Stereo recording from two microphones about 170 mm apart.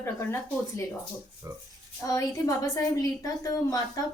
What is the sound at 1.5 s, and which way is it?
Speech, 20° right (ahead or behind).